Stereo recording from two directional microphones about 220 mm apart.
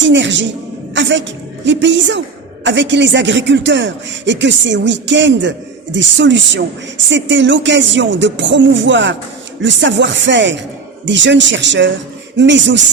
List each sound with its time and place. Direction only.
0.1 s a woman's voice: 55° right (ahead or behind)